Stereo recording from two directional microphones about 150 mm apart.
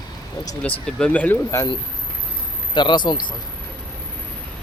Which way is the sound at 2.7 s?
30° left (ahead or behind).